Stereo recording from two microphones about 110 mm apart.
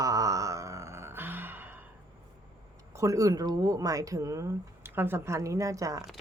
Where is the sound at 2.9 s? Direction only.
30° right (ahead or behind).